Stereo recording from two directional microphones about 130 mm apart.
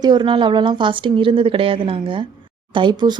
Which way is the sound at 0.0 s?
35° right (ahead or behind).